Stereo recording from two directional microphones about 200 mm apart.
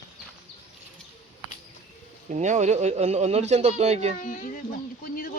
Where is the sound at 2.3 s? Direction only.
35° right (ahead or behind).